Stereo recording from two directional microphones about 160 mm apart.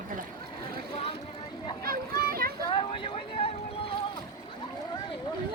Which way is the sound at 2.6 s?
35° left (ahead or behind).